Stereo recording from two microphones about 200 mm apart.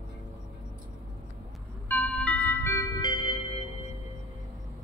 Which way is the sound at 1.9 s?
5° left (ahead or behind).